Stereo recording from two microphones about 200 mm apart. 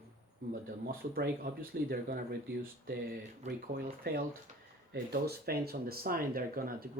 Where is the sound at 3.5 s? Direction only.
55° right (ahead or behind).